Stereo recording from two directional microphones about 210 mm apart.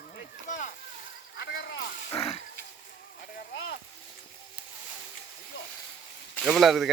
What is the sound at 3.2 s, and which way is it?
Speech, 50° left (ahead or behind).